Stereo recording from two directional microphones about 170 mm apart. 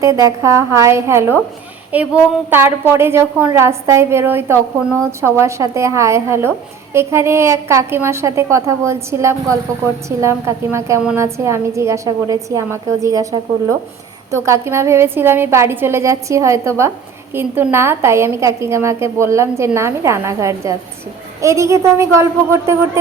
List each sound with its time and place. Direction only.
0.0 s a woman's voice: 20° right (ahead or behind)